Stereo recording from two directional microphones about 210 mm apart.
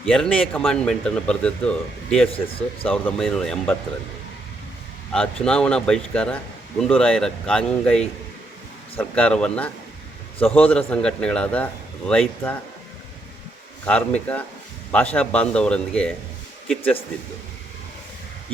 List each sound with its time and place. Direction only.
0.0 s speech: 5° left (ahead or behind)
2.3 s speech: 25° left (ahead or behind)
2.9 s speech: centre (ahead or behind)
5.1 s speech: 5° left (ahead or behind)
13.8 s speech: 5° left (ahead or behind)